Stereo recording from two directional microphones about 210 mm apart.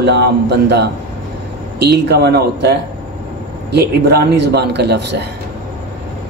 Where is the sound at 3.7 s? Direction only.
50° right (ahead or behind).